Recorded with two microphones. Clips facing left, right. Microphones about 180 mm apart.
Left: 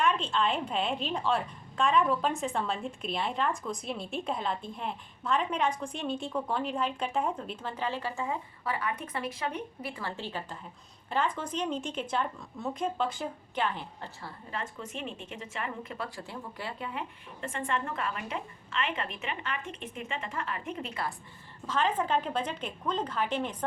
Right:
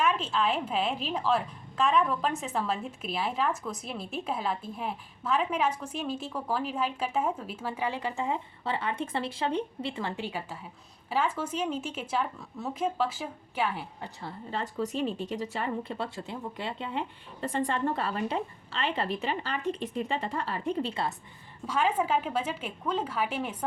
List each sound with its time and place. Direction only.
0.0 s a woman's voice: 5° right (ahead or behind)
14.2 s speech: 35° right (ahead or behind)
21.7 s a woman's voice: 10° right (ahead or behind)